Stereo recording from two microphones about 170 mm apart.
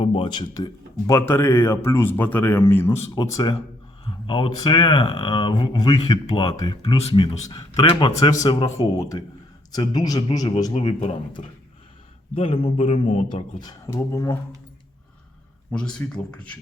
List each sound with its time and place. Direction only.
0.0 s speech: 35° left (ahead or behind); by 3.0 s 15° left (ahead or behind)
3.2 s speech: 25° left (ahead or behind)
6.9 s speech: 35° left (ahead or behind)
7.5 s speech: 25° left (ahead or behind)
10.7 s speech: 35° left (ahead or behind)
12.3 s speech: 35° left (ahead or behind); by 14.3 s 20° left (ahead or behind)
15.7 s speech: 5° left (ahead or behind)